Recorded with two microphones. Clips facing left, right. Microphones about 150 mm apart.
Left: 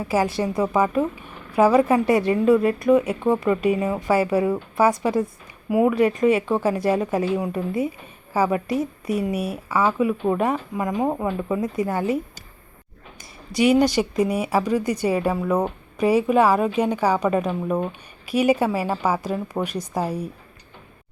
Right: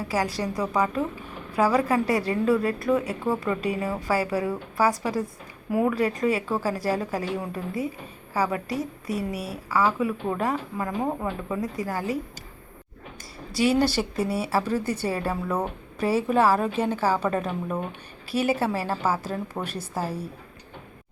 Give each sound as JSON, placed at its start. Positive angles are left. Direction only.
{"t": 0.1, "sound": "a woman's voice", "side_deg": 25}
{"t": 13.5, "sound": "speech", "side_deg": 20}